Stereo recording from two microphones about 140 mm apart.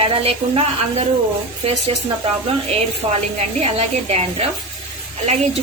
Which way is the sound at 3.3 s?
50° right (ahead or behind).